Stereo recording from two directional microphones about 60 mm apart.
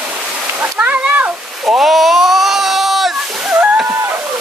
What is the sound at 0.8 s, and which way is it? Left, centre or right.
Speech, right.